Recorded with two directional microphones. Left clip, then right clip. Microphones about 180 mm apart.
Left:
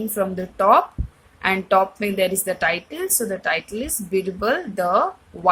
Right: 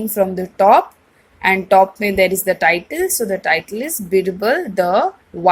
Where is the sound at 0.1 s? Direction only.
15° right (ahead or behind).